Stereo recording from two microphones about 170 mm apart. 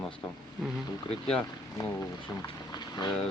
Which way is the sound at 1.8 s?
20° left (ahead or behind).